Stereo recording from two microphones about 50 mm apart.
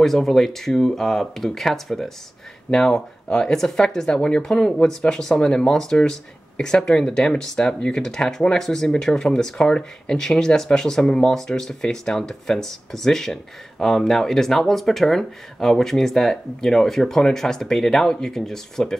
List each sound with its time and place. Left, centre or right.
0.0 s speech: centre